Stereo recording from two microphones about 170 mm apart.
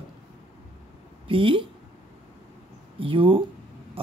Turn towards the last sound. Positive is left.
turn(degrees=-30)  # may be behind; listen again after turning